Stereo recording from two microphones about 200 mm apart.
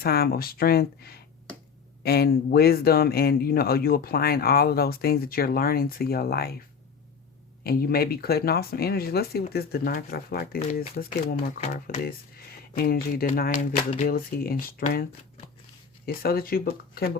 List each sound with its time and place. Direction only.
0.0 s speech: 50° left (ahead or behind)
7.6 s speech: 50° left (ahead or behind)
16.0 s speech: 50° left (ahead or behind)